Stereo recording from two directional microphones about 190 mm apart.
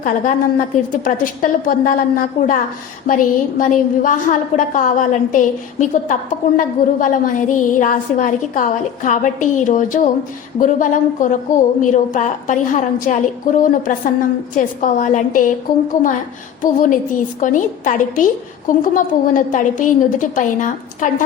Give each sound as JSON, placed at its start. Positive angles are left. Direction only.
{"t": 1.0, "sound": "a woman's voice", "side_deg": 45}